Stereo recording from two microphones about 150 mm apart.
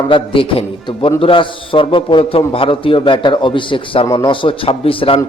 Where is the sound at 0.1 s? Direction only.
35° left (ahead or behind).